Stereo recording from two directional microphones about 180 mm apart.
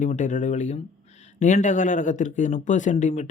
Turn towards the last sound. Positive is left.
turn(degrees=40)  # may be behind; listen again after turning